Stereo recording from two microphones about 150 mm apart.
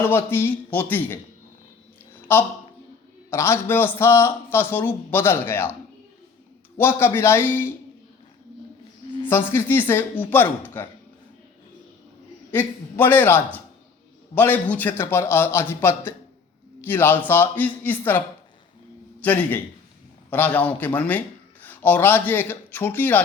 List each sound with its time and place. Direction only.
0.0 s a man's voice: 15° left (ahead or behind)
2.3 s a man's voice: 15° left (ahead or behind)
6.7 s a man's voice: 15° left (ahead or behind)
9.2 s a man's voice: 15° left (ahead or behind)
12.5 s a man's voice: 15° left (ahead or behind)
19.2 s a man's voice: 10° left (ahead or behind)